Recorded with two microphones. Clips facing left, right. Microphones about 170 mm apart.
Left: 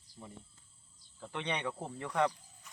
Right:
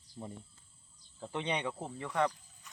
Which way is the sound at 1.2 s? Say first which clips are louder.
Right 2 dB; 25° right (ahead or behind).